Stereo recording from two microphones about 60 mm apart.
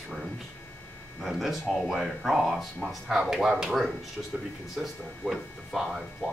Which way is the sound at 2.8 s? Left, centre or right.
Right.